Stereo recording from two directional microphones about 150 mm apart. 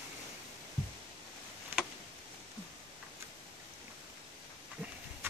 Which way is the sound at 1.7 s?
15° right (ahead or behind).